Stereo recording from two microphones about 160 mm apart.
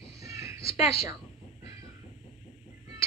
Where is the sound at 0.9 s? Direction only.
20° right (ahead or behind).